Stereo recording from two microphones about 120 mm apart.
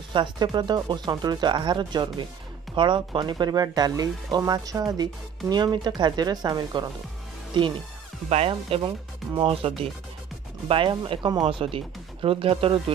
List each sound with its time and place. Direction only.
0.1 s speech: 40° right (ahead or behind)
8.3 s speech: 55° right (ahead or behind)